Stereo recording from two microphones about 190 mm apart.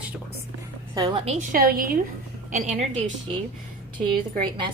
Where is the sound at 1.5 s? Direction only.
50° right (ahead or behind).